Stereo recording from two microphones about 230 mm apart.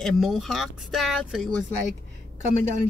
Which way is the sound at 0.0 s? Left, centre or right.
Centre.